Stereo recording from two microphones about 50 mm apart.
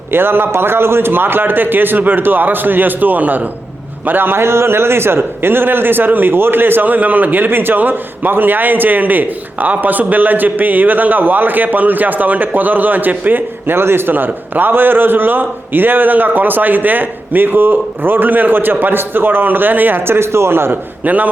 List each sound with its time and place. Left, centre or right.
0.1 s a man's voice: right
21.0 s a man's voice: right